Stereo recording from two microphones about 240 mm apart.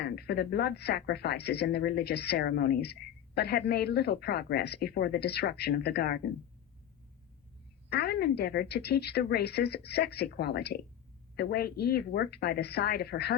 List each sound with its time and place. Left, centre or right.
0.0 s speech: left
7.9 s speech: left